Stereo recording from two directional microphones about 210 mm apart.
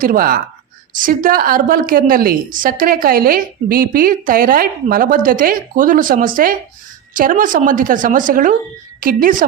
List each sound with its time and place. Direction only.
0.0 s a woman's voice: 40° right (ahead or behind)